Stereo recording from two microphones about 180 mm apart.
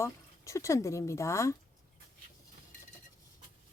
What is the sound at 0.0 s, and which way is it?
Speech, 15° left (ahead or behind).